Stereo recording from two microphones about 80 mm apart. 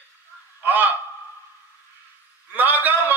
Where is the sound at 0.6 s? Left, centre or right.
Right.